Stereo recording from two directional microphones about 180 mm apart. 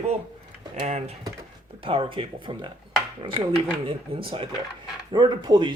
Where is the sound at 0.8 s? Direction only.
35° right (ahead or behind).